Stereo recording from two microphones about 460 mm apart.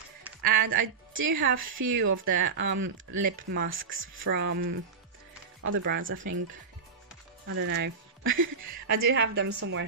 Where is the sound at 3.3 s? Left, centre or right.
Right.